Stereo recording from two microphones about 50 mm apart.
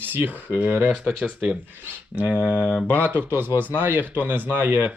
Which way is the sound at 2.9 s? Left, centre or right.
Right.